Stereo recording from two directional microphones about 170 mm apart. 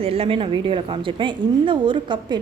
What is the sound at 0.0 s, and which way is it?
A woman's voice, 35° right (ahead or behind).